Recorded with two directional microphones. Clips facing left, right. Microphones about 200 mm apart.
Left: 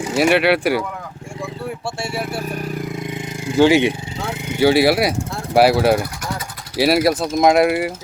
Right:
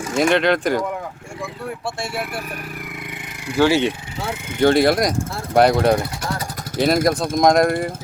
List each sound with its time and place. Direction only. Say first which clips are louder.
0.2 s speech: left 1 dB; 5° left (ahead or behind)
2.0 s speech: left 2 dB; centre (ahead or behind)
2.9 s a sound: left 8 dB; 25° left (ahead or behind)
4.6 s speech: left 1 dB; 5° left (ahead or behind)